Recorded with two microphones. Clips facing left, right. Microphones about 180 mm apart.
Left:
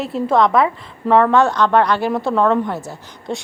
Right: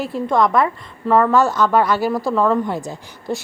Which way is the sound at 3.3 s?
5° right (ahead or behind).